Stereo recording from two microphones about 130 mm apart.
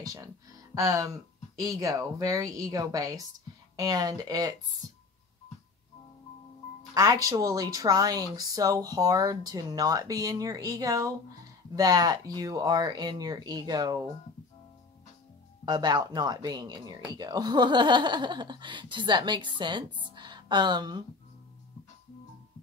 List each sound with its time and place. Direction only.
0.0 s speech: 25° right (ahead or behind)
6.9 s speech: 25° right (ahead or behind)
15.6 s speech: 30° right (ahead or behind)